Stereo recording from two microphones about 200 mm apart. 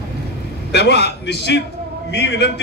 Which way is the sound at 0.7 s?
55° left (ahead or behind).